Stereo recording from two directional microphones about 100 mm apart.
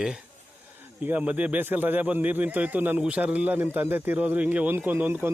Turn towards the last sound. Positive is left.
turn(degrees=-20)  # may be behind; listen again after turning